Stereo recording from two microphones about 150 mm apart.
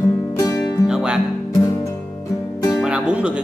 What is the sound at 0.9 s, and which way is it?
Music, 5° right (ahead or behind).